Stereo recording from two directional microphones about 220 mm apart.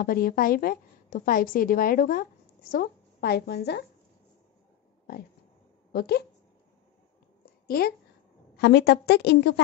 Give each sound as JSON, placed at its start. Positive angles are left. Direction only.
{"t": 0.0, "sound": "a woman's voice", "side_deg": 40}
{"t": 5.9, "sound": "a woman's voice", "side_deg": 45}
{"t": 7.6, "sound": "a woman's voice", "side_deg": 45}